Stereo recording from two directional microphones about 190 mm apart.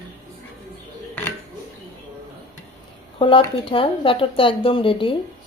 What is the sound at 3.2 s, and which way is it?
Speech, 30° left (ahead or behind).